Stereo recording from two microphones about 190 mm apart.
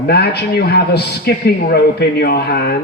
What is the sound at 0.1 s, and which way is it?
A man's voice, 60° left (ahead or behind).